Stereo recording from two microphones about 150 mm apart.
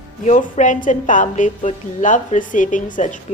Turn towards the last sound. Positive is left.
turn(degrees=55)  # may be behind; listen again after turning